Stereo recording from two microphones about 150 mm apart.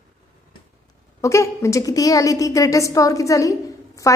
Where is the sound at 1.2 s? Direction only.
20° left (ahead or behind).